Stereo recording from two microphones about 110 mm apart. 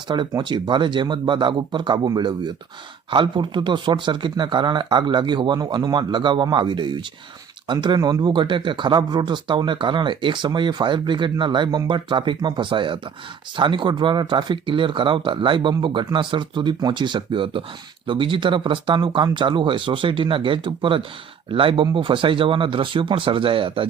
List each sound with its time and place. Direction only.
0.1 s speech: 40° right (ahead or behind)